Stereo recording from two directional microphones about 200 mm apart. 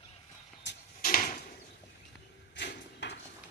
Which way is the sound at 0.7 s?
60° left (ahead or behind).